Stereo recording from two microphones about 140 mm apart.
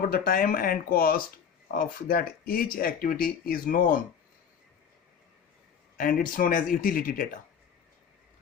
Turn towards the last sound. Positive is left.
turn(degrees=85)